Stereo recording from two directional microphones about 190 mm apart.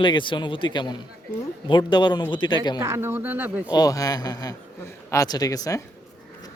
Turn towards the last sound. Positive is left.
turn(degrees=20)  # may be behind; listen again after turning